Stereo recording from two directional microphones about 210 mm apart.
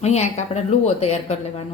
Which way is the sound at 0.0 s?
30° left (ahead or behind).